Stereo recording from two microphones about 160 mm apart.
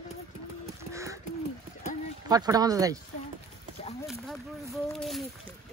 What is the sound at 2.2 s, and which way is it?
Speech, 25° right (ahead or behind).